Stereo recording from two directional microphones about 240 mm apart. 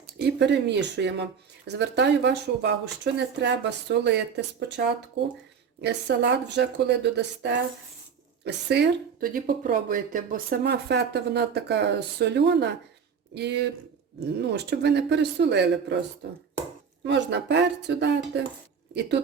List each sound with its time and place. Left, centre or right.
0.2 s speech: right
17.1 s speech: right